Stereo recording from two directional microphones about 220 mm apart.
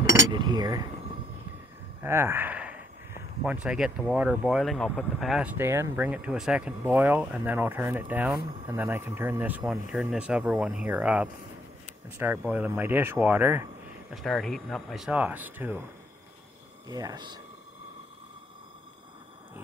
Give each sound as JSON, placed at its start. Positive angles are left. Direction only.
{"t": 0.1, "sound": "speech", "side_deg": -20}
{"t": 2.0, "sound": "a sound", "side_deg": -10}
{"t": 3.6, "sound": "speech", "side_deg": -5}
{"t": 14.1, "sound": "speech", "side_deg": 0}
{"t": 16.8, "sound": "speech", "side_deg": -15}